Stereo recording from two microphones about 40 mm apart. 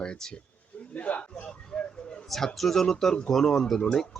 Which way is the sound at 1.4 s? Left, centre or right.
Centre.